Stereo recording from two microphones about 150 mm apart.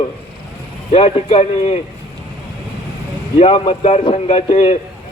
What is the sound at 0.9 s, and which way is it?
Speech, 40° left (ahead or behind).